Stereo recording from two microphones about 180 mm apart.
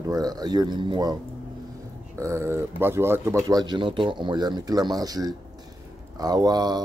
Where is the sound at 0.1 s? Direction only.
20° right (ahead or behind).